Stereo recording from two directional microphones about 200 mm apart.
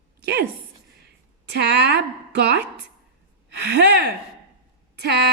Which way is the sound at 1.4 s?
55° right (ahead or behind).